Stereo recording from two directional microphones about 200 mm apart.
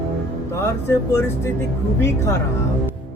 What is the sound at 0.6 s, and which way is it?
Speech, 15° left (ahead or behind).